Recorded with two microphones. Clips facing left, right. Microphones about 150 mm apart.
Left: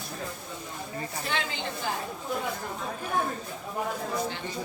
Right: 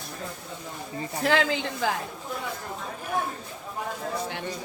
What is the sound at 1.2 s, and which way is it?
Speech, 90° right.